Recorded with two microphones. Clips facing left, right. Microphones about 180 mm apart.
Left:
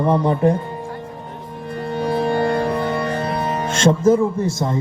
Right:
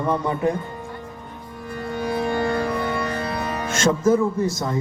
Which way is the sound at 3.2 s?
25° left (ahead or behind).